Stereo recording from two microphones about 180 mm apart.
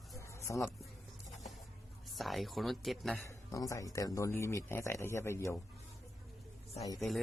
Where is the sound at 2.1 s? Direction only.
Centre (ahead or behind).